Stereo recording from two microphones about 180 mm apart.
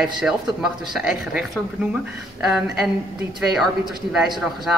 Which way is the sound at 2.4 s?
5° right (ahead or behind).